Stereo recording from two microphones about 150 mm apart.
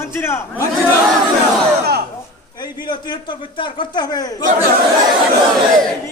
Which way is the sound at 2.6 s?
30° left (ahead or behind).